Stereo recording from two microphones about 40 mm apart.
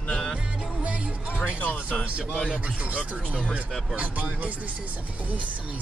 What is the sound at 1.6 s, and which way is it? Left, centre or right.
Music, left.